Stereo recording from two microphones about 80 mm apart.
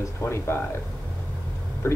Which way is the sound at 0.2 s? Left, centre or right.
Left.